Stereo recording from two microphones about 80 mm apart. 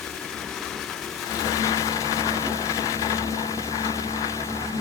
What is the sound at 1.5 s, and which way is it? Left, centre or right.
Vehicle, left.